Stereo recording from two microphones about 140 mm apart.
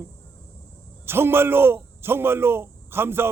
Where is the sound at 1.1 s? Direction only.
15° right (ahead or behind).